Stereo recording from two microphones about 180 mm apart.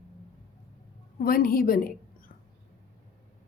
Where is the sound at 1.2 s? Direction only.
55° left (ahead or behind).